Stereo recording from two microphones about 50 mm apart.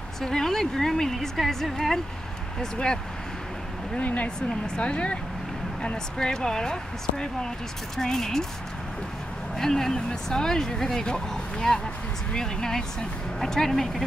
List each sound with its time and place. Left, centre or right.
0.2 s speech: centre
3.9 s speech: left
4.4 s speech: centre
9.6 s speech: centre